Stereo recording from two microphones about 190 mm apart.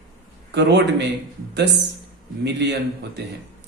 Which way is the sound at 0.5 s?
65° right (ahead or behind).